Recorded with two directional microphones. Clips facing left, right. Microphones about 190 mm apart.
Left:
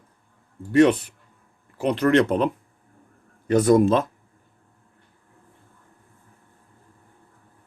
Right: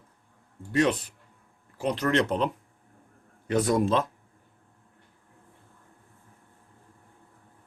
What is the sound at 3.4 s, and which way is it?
Speech, 45° left (ahead or behind).